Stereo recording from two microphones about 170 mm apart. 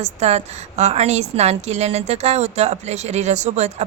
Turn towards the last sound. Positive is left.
turn(degrees=-40)  # may be behind; listen again after turning